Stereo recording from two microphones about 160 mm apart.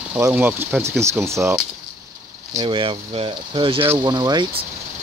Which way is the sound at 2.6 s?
30° right (ahead or behind).